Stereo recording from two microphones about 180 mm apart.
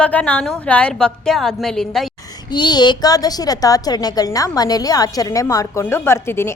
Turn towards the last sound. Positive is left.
turn(degrees=15)  # may be behind; listen again after turning